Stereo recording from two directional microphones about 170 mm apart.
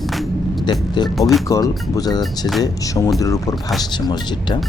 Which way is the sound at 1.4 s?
20° left (ahead or behind).